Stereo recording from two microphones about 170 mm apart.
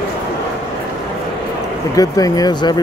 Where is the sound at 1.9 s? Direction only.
20° left (ahead or behind).